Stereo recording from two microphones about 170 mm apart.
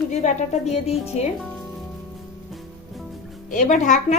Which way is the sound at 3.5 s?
50° left (ahead or behind).